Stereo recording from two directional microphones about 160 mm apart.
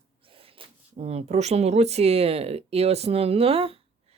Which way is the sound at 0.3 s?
35° right (ahead or behind).